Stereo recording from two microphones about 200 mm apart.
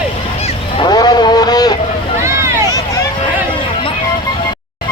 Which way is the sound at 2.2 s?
15° right (ahead or behind).